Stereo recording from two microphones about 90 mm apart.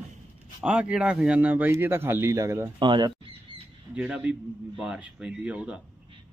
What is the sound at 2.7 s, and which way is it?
Speech, 60° right (ahead or behind).